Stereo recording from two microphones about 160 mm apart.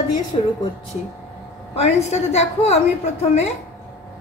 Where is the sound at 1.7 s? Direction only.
45° left (ahead or behind).